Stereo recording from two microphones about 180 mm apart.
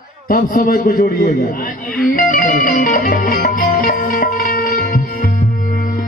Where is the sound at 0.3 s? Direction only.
50° left (ahead or behind).